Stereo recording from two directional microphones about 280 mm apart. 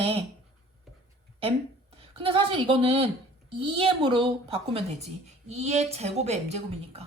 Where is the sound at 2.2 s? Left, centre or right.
Centre.